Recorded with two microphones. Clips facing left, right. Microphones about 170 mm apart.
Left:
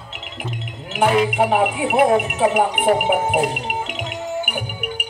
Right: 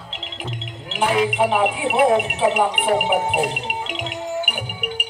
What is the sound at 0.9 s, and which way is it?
Music, 45° left (ahead or behind).